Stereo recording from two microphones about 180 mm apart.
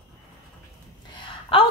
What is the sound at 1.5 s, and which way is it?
Speech, 30° left (ahead or behind).